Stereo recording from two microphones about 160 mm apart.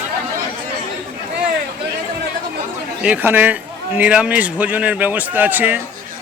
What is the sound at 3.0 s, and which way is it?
A man's voice, 10° right (ahead or behind).